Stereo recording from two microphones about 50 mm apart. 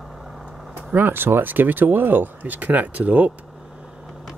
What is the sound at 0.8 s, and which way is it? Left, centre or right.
Speech, right.